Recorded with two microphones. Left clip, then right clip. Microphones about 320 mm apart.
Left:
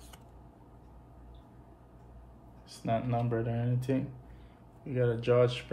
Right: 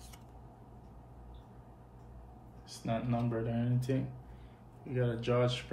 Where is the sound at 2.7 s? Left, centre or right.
Left.